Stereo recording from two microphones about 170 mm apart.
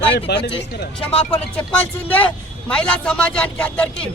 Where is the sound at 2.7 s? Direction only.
5° left (ahead or behind).